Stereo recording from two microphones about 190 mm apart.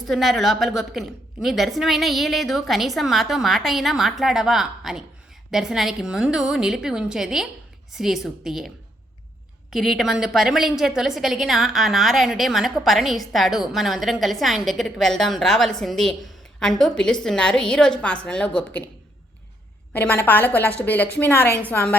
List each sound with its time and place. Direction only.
0.1 s a woman's voice: centre (ahead or behind)
19.9 s a woman's voice: 10° left (ahead or behind)